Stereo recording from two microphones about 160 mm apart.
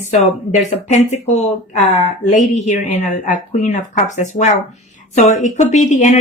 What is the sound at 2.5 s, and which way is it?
Speech, 45° left (ahead or behind).